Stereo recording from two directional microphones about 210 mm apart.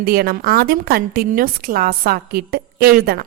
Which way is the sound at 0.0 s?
45° right (ahead or behind).